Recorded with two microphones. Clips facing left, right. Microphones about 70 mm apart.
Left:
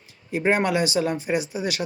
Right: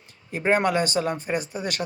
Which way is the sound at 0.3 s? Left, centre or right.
Centre.